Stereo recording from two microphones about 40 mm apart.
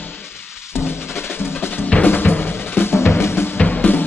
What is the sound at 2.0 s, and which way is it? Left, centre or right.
Drum, left.